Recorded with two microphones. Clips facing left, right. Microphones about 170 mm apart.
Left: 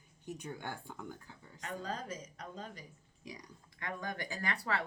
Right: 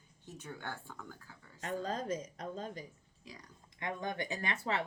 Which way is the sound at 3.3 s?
15° left (ahead or behind).